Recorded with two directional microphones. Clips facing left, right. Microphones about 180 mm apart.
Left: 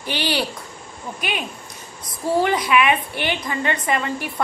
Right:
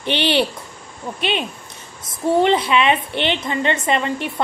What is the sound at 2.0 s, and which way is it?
A woman's voice, 25° right (ahead or behind).